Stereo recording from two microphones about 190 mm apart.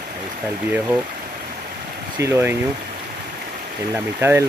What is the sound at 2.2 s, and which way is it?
Speech, 10° right (ahead or behind).